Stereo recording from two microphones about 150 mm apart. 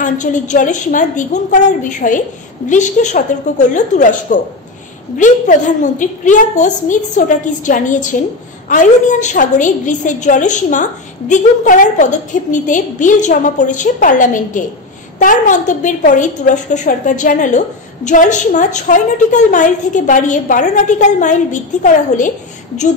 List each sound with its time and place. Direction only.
0.0 s a woman's voice: 55° left (ahead or behind)